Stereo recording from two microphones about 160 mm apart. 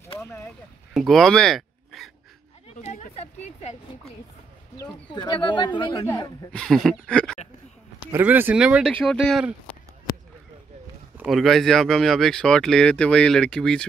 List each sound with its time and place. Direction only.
0.9 s speech: centre (ahead or behind)
2.7 s a sound: 45° left (ahead or behind)
5.1 s speech: 30° left (ahead or behind)
6.0 s speech: 20° left (ahead or behind)
6.5 s speech: 5° left (ahead or behind)
8.1 s speech: 10° right (ahead or behind)
11.2 s speech: centre (ahead or behind)